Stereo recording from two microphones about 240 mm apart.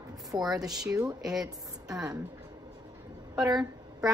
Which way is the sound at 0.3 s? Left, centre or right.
Centre.